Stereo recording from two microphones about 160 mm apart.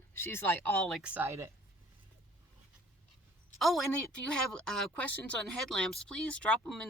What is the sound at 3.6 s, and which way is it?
A woman's voice, centre (ahead or behind).